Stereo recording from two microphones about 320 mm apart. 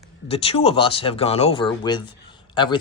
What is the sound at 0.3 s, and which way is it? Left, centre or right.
Speech, centre.